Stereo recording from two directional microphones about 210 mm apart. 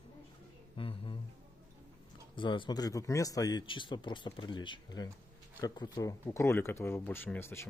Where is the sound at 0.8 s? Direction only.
25° left (ahead or behind).